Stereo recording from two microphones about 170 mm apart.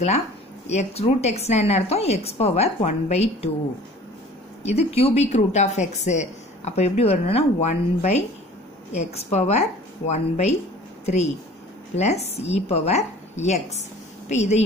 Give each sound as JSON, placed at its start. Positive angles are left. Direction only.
{"t": 0.7, "sound": "a woman's voice", "side_deg": 40}
{"t": 4.6, "sound": "a woman's voice", "side_deg": 35}
{"t": 11.9, "sound": "a woman's voice", "side_deg": 40}